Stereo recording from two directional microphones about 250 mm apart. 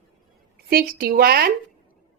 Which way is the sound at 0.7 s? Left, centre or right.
Right.